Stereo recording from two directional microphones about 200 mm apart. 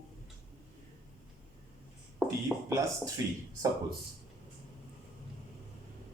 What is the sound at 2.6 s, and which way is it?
Speech, 15° right (ahead or behind).